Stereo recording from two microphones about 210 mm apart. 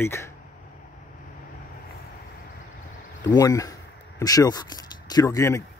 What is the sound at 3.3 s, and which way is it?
Speech, 15° left (ahead or behind).